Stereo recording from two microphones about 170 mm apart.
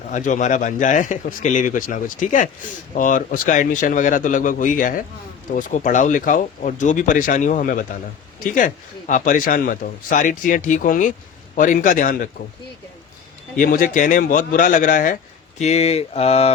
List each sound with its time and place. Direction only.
0.1 s speech: 45° left (ahead or behind)
13.6 s speech: 55° left (ahead or behind)